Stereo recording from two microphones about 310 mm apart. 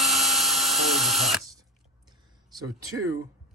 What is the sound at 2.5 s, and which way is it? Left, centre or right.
Speech, centre.